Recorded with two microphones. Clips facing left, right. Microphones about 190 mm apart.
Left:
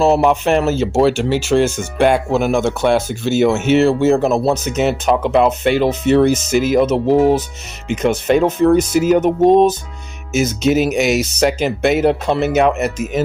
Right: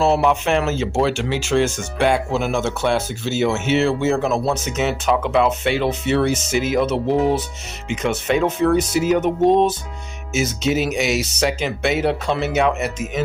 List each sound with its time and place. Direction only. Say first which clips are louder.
0.0 s speech: left 4 dB; 40° left (ahead or behind)